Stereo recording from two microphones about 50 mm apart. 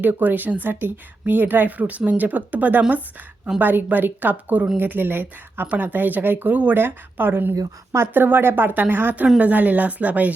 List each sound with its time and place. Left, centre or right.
0.0 s a woman's voice: right
6.5 s a woman's voice: right
6.7 s speech: right
9.4 s a woman's voice: right